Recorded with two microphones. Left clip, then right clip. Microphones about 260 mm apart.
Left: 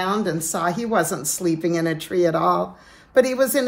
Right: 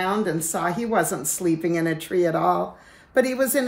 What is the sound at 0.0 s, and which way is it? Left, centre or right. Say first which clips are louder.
A woman's voice: left 1 dB; centre.